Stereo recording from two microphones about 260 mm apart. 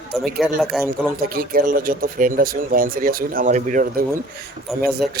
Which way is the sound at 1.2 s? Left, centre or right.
Right.